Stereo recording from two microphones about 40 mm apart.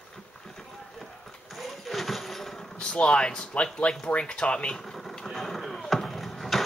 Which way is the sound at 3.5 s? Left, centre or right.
Left.